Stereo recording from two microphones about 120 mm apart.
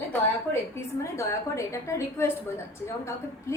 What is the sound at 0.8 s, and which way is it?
A woman's voice, 25° left (ahead or behind).